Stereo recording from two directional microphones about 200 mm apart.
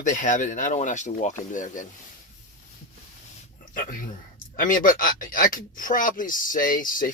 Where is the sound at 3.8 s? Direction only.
45° left (ahead or behind).